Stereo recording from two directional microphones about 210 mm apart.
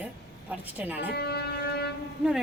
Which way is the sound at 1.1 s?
50° left (ahead or behind).